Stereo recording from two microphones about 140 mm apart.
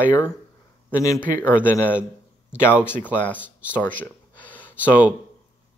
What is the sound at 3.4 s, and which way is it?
Speech, 10° right (ahead or behind).